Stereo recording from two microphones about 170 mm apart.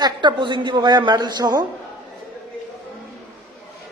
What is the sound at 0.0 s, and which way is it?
A woman's voice, 25° right (ahead or behind).